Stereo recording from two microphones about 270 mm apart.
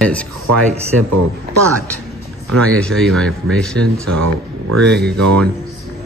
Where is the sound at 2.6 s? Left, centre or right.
Centre.